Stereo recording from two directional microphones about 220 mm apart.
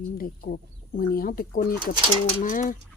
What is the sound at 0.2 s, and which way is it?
Speech, 40° left (ahead or behind).